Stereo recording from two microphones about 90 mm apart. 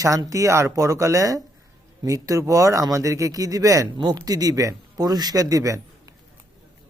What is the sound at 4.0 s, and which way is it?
A woman's voice, 50° right (ahead or behind).